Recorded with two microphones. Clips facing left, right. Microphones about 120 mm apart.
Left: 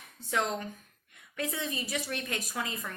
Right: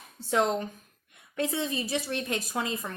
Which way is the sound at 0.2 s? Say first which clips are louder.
Right 6 dB; 30° right (ahead or behind).